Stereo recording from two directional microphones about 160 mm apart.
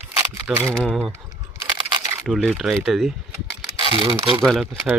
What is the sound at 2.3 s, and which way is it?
Speech, centre (ahead or behind).